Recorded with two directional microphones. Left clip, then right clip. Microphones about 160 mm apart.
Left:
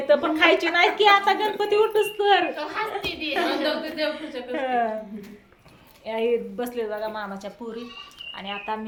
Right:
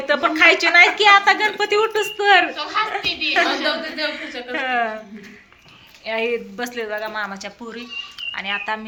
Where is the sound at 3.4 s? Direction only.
30° right (ahead or behind).